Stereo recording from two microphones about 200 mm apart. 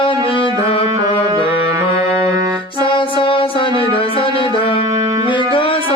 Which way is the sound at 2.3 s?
20° right (ahead or behind).